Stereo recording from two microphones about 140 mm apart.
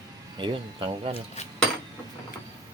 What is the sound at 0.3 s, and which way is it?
Speech, 35° right (ahead or behind).